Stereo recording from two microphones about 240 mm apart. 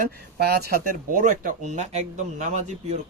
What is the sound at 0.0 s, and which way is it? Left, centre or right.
Speech, right.